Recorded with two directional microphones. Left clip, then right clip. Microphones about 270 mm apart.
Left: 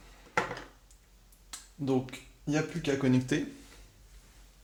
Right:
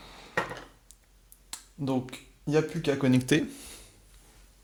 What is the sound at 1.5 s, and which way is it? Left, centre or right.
Speech, right.